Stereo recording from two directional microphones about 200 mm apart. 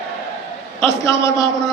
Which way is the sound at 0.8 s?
15° left (ahead or behind).